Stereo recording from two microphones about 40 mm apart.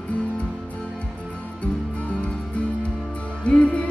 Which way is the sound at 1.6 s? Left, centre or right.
Left.